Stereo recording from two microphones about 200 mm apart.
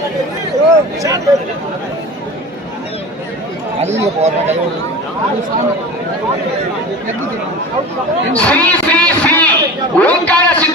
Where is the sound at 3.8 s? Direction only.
35° right (ahead or behind).